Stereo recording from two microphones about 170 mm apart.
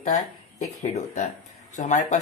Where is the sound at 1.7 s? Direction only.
45° left (ahead or behind).